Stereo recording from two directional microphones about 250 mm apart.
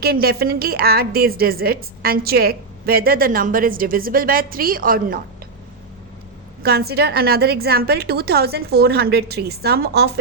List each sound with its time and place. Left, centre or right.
0.0 s a woman's voice: right
6.6 s a woman's voice: right